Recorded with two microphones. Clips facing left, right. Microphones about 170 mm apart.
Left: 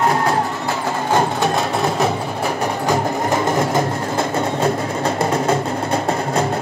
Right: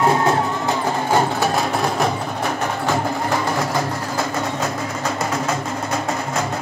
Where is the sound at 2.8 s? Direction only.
20° left (ahead or behind).